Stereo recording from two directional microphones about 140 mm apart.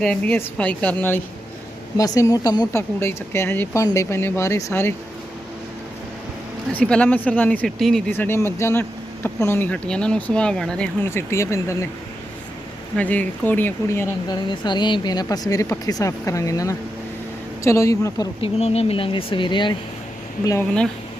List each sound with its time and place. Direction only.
0.0 s speech: 5° left (ahead or behind)
2.0 s speech: 25° left (ahead or behind)
6.7 s speech: 5° left (ahead or behind)
8.1 s speech: 15° left (ahead or behind)
11.0 s speech: 15° left (ahead or behind)
13.0 s speech: 10° left (ahead or behind)
14.3 s speech: 30° left (ahead or behind)
18.3 s speech: 45° left (ahead or behind)
20.4 s speech: 25° left (ahead or behind)